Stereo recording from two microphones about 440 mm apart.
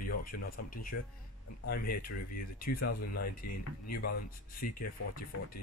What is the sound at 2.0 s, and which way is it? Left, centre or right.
Speech, centre.